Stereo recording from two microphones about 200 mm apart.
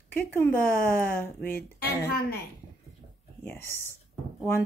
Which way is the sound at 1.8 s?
50° left (ahead or behind).